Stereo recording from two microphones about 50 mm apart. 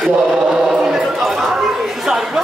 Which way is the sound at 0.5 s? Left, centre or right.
Centre.